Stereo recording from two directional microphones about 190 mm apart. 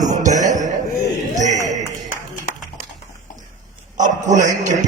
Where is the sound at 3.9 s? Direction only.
40° right (ahead or behind).